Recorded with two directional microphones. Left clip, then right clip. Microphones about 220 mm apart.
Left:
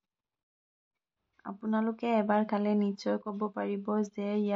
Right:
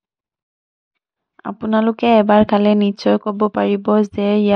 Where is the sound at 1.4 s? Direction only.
40° right (ahead or behind).